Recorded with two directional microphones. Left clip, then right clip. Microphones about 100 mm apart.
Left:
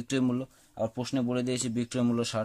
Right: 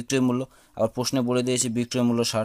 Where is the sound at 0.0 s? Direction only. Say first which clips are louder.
Right 6 dB; 30° right (ahead or behind).